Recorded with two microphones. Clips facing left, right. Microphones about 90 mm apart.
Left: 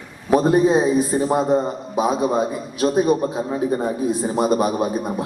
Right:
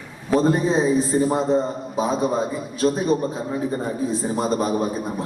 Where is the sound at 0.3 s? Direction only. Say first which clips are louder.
Left 3 dB; 15° left (ahead or behind).